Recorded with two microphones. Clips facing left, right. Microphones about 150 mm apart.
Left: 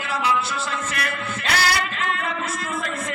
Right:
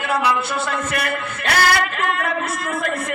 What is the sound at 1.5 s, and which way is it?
Chant, 55° right (ahead or behind).